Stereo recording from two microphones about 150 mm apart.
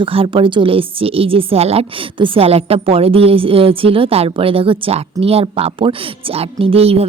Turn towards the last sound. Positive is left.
turn(degrees=-40)  # may be behind; listen again after turning